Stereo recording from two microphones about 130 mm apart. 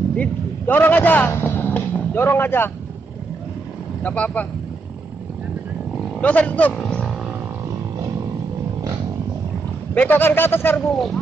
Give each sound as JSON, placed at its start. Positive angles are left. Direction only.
{"t": 0.2, "sound": "a man's voice", "side_deg": 15}
{"t": 4.0, "sound": "a man's voice", "side_deg": 10}
{"t": 6.2, "sound": "a man's voice", "side_deg": 10}
{"t": 9.9, "sound": "a man's voice", "side_deg": 15}
{"t": 10.9, "sound": "speech", "side_deg": 0}